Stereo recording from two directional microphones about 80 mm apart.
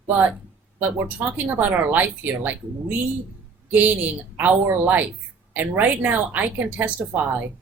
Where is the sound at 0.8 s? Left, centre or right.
Right.